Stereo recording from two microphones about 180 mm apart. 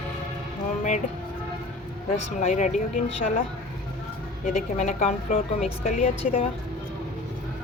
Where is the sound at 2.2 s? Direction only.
40° left (ahead or behind).